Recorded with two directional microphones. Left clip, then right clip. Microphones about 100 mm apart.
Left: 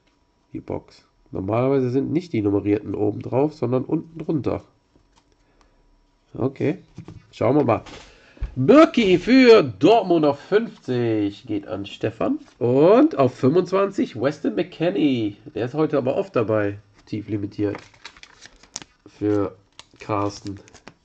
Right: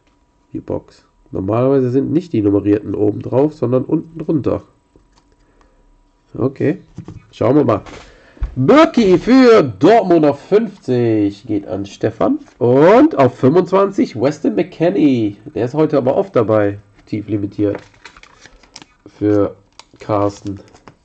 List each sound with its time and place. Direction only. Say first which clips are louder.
0.5 s speech: right 7 dB; 5° right (ahead or behind)
6.3 s speech: right 6 dB; centre (ahead or behind)
8.9 s speech: right 6 dB; 10° right (ahead or behind)
10.1 s speech: right 6 dB; 25° right (ahead or behind)
12.4 s speech: right 6 dB; 5° right (ahead or behind)
13.8 s speech: right 7 dB; 20° right (ahead or behind)
15.9 s speech: right 7 dB; 20° right (ahead or behind)
17.0 s speech: right 7 dB; centre (ahead or behind)
17.7 s typing: right 7 dB; 45° left (ahead or behind)
19.0 s speech: right 8 dB; 10° right (ahead or behind)
20.4 s computer keyboard: right 7 dB; 30° left (ahead or behind)